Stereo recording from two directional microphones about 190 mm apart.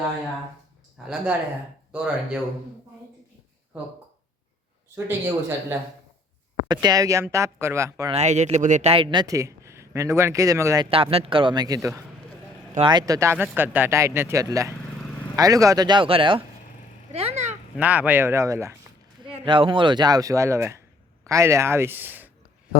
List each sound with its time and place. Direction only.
1.0 s speech: 5° right (ahead or behind)
4.9 s speech: 10° right (ahead or behind)
8.1 s speech: 35° right (ahead or behind); by 10.8 s 15° right (ahead or behind)
10.8 s speech: 30° right (ahead or behind)
17.7 s speech: 10° right (ahead or behind)
19.2 s speech: 25° right (ahead or behind); by 22.3 s 10° right (ahead or behind)